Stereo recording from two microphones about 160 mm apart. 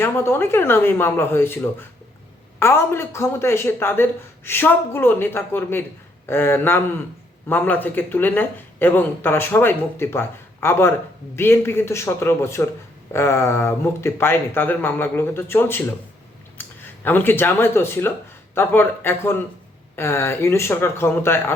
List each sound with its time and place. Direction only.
0.0 s speech: 15° left (ahead or behind)